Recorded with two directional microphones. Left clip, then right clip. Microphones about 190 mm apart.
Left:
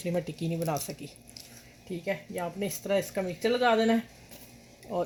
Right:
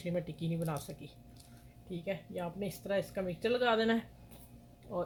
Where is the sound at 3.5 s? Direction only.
30° left (ahead or behind).